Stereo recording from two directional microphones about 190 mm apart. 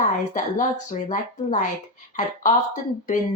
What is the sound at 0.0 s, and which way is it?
Speech, 40° left (ahead or behind).